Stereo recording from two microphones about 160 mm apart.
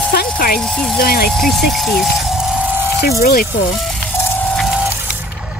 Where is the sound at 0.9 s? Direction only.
70° left (ahead or behind).